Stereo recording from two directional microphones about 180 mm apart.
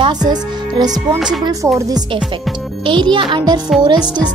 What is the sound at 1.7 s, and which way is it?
Speech, 20° right (ahead or behind).